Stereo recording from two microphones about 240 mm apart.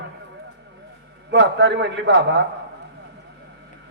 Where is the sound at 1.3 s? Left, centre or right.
Right.